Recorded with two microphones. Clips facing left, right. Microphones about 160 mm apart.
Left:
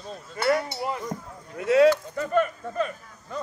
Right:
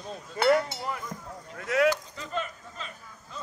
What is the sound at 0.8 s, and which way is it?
Speech, 25° left (ahead or behind).